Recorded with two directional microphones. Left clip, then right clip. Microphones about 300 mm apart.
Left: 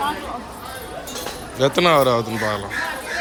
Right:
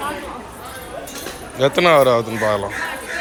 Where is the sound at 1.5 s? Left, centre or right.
Centre.